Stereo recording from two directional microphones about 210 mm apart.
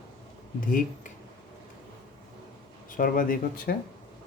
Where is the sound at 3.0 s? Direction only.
40° left (ahead or behind).